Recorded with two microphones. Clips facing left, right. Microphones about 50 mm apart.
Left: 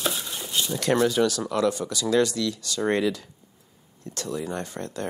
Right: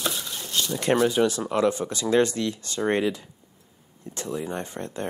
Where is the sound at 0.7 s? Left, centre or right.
Right.